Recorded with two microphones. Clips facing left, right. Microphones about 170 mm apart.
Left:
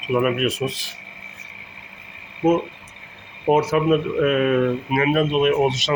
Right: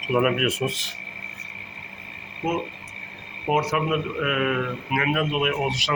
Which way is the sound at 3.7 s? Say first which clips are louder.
Left 6 dB; 30° left (ahead or behind).